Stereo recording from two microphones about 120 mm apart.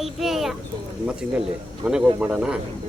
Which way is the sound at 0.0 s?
Centre (ahead or behind).